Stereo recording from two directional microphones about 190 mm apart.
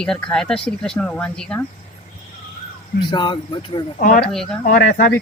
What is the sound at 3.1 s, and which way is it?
Speech, 25° left (ahead or behind).